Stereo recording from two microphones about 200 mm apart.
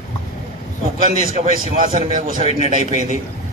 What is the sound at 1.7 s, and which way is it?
Speech, 40° right (ahead or behind).